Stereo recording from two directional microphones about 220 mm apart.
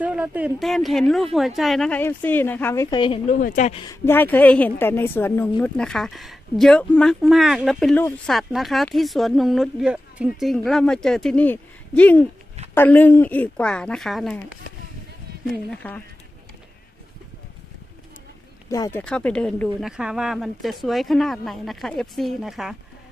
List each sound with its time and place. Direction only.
0.0 s a woman's voice: 5° right (ahead or behind); by 3.2 s 20° left (ahead or behind)
3.3 s speech: 35° left (ahead or behind)
3.8 s a woman's voice: 10° left (ahead or behind)
15.7 s speech: 5° left (ahead or behind)
18.7 s a woman's voice: 10° left (ahead or behind)